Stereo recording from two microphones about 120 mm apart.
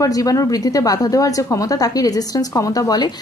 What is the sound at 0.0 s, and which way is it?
A woman's voice, 30° left (ahead or behind).